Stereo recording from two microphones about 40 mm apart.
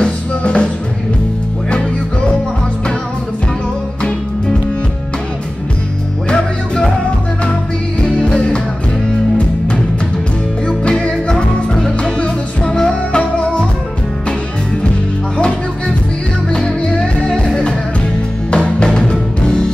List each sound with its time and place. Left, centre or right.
0.0 s music: left
6.2 s music: left
8.0 s music: left
10.7 s music: left
16.4 s music: centre
18.5 s music: left